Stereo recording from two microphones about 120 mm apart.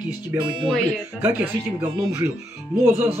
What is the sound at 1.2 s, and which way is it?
Speech, 15° right (ahead or behind).